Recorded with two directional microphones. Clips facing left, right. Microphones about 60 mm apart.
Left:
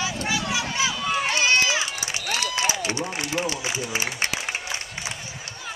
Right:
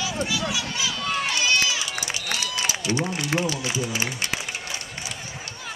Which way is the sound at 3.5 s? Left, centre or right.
Left.